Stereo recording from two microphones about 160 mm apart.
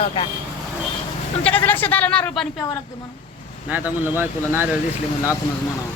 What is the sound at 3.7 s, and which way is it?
Speech, 10° right (ahead or behind).